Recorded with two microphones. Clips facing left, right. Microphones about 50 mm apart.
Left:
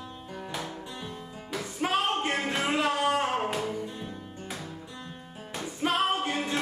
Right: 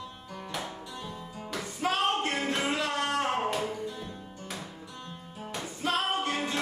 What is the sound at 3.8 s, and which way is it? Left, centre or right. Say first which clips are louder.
Music: even; left.